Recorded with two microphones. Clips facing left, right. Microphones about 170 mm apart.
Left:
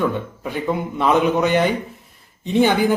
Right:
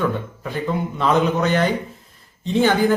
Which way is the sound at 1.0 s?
15° left (ahead or behind).